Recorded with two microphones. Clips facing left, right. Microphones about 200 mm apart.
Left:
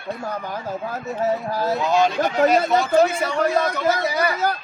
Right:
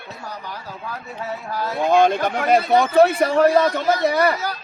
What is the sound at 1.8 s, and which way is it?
A man's voice, 55° right (ahead or behind).